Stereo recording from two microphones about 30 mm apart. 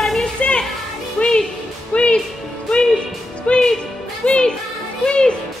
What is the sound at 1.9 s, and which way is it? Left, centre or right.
Speech, left.